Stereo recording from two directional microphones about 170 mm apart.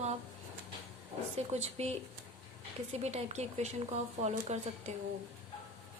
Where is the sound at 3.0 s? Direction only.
40° right (ahead or behind).